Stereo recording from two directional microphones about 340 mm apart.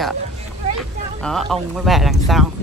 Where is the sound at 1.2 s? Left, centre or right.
Centre.